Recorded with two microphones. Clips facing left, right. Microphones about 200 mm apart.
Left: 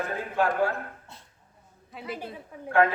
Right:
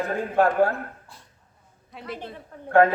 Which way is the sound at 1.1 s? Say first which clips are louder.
Even; 25° left (ahead or behind).